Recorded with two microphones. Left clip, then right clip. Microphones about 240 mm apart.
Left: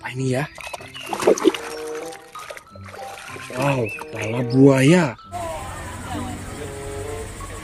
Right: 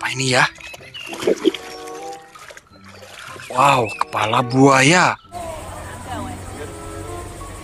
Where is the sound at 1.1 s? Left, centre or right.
Centre.